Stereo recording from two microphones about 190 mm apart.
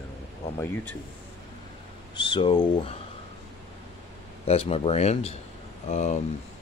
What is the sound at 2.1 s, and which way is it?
Speech, 25° left (ahead or behind).